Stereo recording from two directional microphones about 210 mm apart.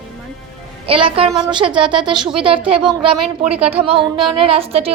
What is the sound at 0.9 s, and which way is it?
A woman's voice, 25° right (ahead or behind).